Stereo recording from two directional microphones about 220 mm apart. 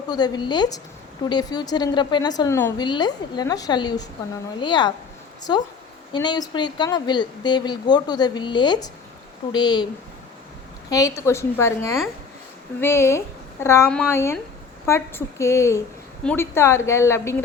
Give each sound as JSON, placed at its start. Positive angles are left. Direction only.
{"t": 0.1, "sound": "speech", "side_deg": 20}
{"t": 10.8, "sound": "a woman's voice", "side_deg": 15}